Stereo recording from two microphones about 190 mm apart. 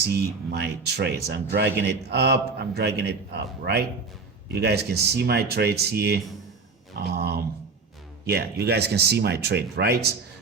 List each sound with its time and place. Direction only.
0.5 s speech: 60° right (ahead or behind)